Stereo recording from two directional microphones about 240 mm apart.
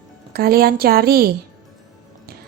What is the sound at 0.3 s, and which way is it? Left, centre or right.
Speech, right.